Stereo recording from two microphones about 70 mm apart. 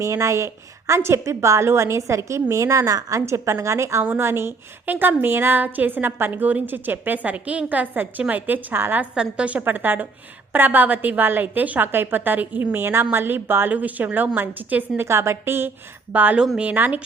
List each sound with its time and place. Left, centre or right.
0.0 s a woman's voice: right
9.1 s a woman's voice: centre
15.0 s a woman's voice: right
16.1 s a woman's voice: right